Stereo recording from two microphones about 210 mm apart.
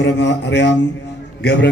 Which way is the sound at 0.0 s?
55° left (ahead or behind).